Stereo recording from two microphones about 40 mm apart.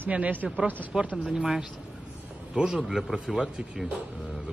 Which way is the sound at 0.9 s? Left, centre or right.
Centre.